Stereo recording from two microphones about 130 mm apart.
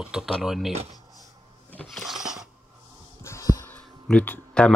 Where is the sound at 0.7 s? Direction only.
55° right (ahead or behind).